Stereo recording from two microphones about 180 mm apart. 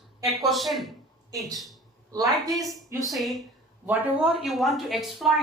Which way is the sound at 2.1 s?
20° right (ahead or behind).